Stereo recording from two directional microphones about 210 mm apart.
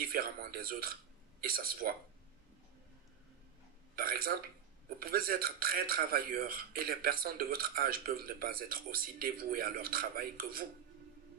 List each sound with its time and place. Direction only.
0.0 s a man's voice: 45° right (ahead or behind)
3.9 s a man's voice: 45° right (ahead or behind)